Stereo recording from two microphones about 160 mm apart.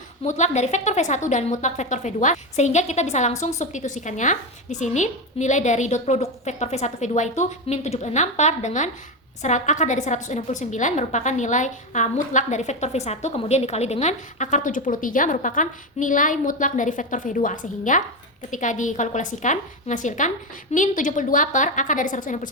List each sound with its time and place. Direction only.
0.3 s a woman's voice: 50° left (ahead or behind)